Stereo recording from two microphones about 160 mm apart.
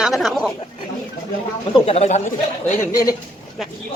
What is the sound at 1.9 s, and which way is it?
Speech, 40° left (ahead or behind).